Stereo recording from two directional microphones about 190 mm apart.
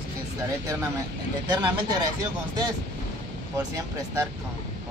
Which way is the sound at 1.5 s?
25° right (ahead or behind).